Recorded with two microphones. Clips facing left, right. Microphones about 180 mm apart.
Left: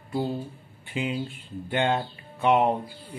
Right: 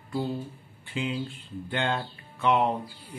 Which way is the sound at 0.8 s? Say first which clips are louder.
Left 2 dB; 15° left (ahead or behind).